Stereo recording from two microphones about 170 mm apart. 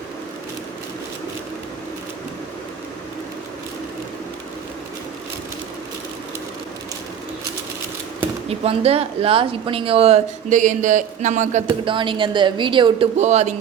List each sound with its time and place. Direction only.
8.4 s speech: 35° right (ahead or behind)
11.9 s a woman's voice: 30° right (ahead or behind)
13.1 s speech: 40° right (ahead or behind)